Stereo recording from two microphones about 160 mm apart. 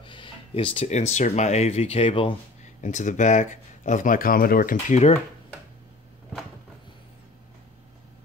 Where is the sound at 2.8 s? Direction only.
50° left (ahead or behind).